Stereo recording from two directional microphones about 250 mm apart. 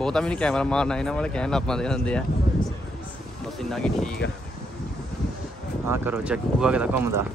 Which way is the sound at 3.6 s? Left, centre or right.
Centre.